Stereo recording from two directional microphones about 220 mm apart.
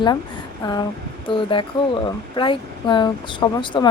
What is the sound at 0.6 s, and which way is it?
A woman's voice, 20° left (ahead or behind).